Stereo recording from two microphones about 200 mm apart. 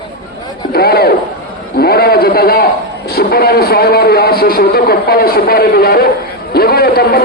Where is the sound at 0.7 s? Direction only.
50° left (ahead or behind).